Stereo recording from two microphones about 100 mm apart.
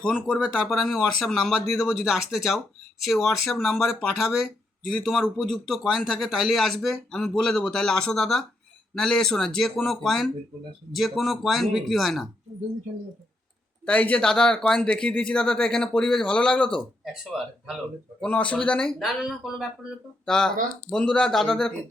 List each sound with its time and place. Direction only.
0.0 s speech: 5° left (ahead or behind)
13.8 s speech: 15° left (ahead or behind)
17.0 s speech: 5° right (ahead or behind)
18.2 s speech: 10° left (ahead or behind)
20.2 s speech: 5° left (ahead or behind)